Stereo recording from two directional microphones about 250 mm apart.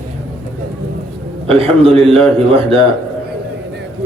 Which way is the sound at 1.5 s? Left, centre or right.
Right.